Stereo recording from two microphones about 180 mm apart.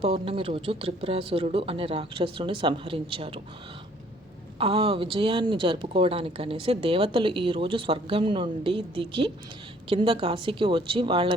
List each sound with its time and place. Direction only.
0.0 s speech: 30° right (ahead or behind)
4.5 s speech: 30° right (ahead or behind)